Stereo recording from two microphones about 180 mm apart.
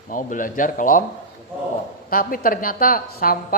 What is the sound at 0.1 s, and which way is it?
Speech, 45° left (ahead or behind).